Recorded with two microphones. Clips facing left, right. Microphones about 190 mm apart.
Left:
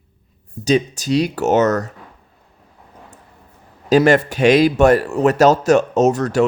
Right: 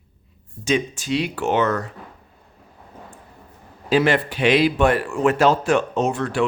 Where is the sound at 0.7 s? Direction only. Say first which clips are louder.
Left 5 dB; 40° left (ahead or behind).